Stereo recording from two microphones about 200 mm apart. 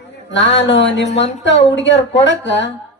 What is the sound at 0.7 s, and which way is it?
Speech, 65° left (ahead or behind).